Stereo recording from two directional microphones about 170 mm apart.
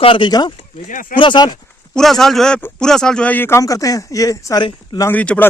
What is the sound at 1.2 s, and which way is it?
Speech, 25° left (ahead or behind).